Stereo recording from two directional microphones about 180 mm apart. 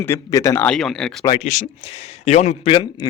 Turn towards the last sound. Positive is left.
turn(degrees=30)  # may be behind; listen again after turning